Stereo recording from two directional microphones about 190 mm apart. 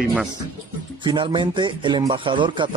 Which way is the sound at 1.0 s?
25° right (ahead or behind).